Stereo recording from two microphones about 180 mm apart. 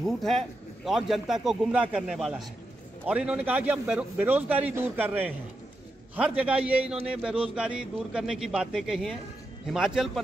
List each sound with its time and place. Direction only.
0.0 s a man's voice: centre (ahead or behind)